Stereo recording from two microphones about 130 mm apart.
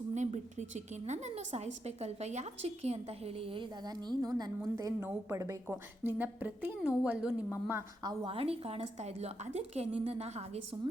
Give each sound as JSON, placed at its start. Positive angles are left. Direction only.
{"t": 0.7, "sound": "a woman's voice", "side_deg": -65}
{"t": 8.0, "sound": "a woman's voice", "side_deg": -40}